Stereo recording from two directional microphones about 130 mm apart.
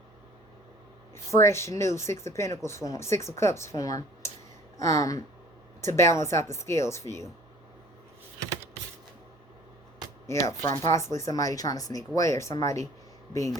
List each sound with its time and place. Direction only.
1.1 s speech: 20° left (ahead or behind)
10.2 s speech: 20° left (ahead or behind)